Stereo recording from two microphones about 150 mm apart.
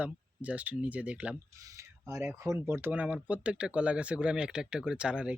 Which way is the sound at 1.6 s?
20° right (ahead or behind).